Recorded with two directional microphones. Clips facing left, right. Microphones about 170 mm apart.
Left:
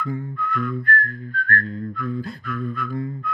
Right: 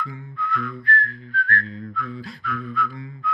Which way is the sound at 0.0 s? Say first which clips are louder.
Left 4 dB; 50° left (ahead or behind).